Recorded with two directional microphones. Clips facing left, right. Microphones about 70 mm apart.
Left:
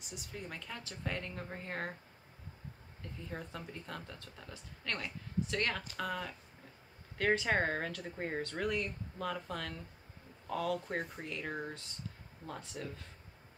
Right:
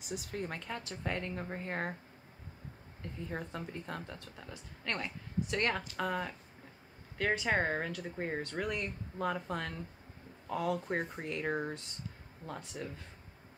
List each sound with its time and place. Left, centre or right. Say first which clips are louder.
0.1 s speech: right 7 dB; right
3.3 s speech: right 3 dB; right
7.3 s speech: right 1 dB; centre